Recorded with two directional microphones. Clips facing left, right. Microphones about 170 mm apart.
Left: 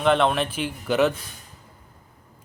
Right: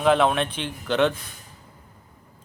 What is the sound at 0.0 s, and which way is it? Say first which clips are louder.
A man's voice: right 1 dB; centre (ahead or behind).